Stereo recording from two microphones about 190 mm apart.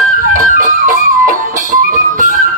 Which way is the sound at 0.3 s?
45° right (ahead or behind).